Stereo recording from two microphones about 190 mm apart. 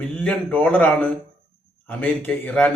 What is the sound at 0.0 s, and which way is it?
Speech, 10° left (ahead or behind).